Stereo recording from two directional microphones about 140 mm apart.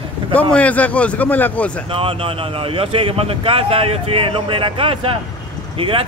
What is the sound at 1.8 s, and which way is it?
Speech, 40° right (ahead or behind).